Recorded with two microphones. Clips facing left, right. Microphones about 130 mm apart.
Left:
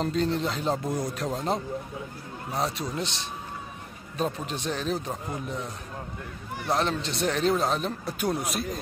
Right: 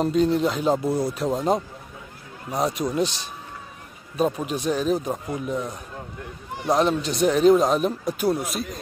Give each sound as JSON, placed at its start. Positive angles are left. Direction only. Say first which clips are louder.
{"t": 0.0, "sound": "speech", "louder": "right 6 dB", "side_deg": -10}
{"t": 3.0, "sound": "a man's voice", "louder": "right 8 dB", "side_deg": 25}
{"t": 4.2, "sound": "speech", "louder": "right 6 dB", "side_deg": -10}
{"t": 8.2, "sound": "speech", "louder": "right 4 dB", "side_deg": 0}